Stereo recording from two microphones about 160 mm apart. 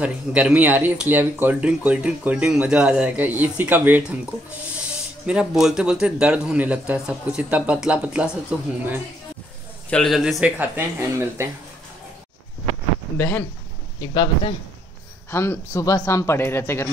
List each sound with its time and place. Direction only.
0.0 s speech: 10° right (ahead or behind)
5.2 s speech: 5° right (ahead or behind)
9.8 s speech: 5° left (ahead or behind); by 11.4 s 15° right (ahead or behind)
13.2 s speech: 15° left (ahead or behind)
13.9 s speech: 30° left (ahead or behind)
15.3 s speech: 15° left (ahead or behind)